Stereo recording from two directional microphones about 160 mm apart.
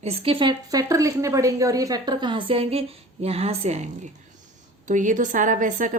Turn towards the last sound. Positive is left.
turn(degrees=-55)  # may be behind; listen again after turning